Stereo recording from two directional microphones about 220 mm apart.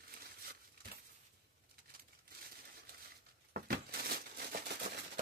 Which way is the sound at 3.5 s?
45° right (ahead or behind).